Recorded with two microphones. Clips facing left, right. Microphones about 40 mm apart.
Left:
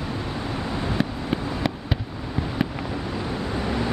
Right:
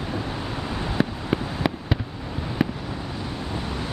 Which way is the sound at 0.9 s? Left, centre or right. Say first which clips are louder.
Right 1 dB; centre.